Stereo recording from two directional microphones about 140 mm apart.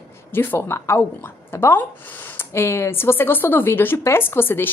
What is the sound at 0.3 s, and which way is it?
Speech, 15° left (ahead or behind).